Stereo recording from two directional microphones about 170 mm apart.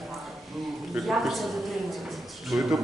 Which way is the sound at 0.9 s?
Centre (ahead or behind).